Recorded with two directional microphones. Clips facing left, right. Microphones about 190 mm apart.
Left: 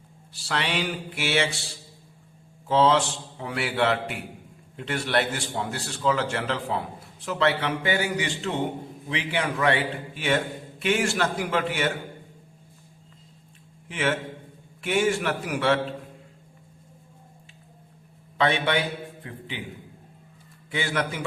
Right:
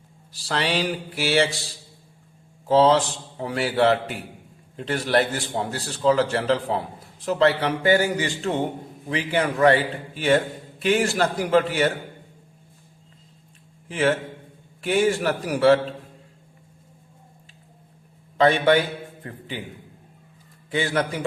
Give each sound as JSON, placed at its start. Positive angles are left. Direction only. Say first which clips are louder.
{"t": 0.4, "sound": "a man's voice", "louder": "right 4 dB", "side_deg": -35}
{"t": 2.6, "sound": "a man's voice", "louder": "right 4 dB", "side_deg": -35}
{"t": 13.8, "sound": "a man's voice", "louder": "right 5 dB", "side_deg": -35}
{"t": 18.3, "sound": "a man's voice", "louder": "right 6 dB", "side_deg": -40}
{"t": 20.7, "sound": "a man's voice", "louder": "right 4 dB", "side_deg": -35}